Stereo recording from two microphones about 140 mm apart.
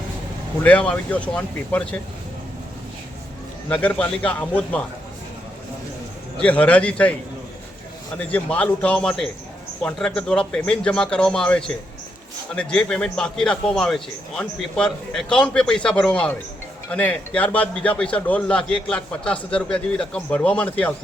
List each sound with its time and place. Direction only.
0.6 s a man's voice: 10° left (ahead or behind)
3.7 s a man's voice: 10° left (ahead or behind)
6.4 s a man's voice: 10° left (ahead or behind)
8.2 s a man's voice: 10° left (ahead or behind)